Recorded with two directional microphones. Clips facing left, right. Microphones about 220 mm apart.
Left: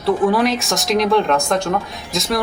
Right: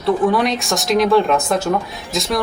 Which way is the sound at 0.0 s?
Centre (ahead or behind).